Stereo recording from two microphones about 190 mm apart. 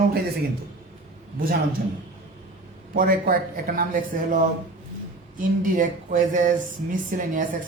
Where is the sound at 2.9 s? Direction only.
50° right (ahead or behind).